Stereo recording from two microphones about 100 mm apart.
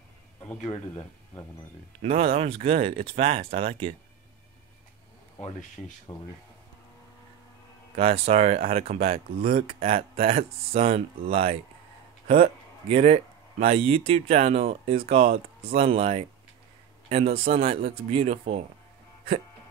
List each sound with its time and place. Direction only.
2.0 s speech: 70° right (ahead or behind)
6.1 s speech: 35° left (ahead or behind)
7.9 s speech: 90° right